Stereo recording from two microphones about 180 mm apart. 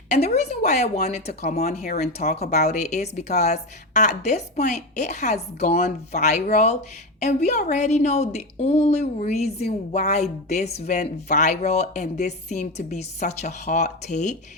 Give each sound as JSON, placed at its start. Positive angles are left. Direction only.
{"t": 0.1, "sound": "a woman's voice", "side_deg": 35}
{"t": 2.2, "sound": "speech", "side_deg": 60}
{"t": 2.5, "sound": "a woman's voice", "side_deg": 40}